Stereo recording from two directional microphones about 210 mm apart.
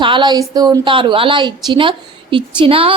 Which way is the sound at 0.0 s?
20° right (ahead or behind).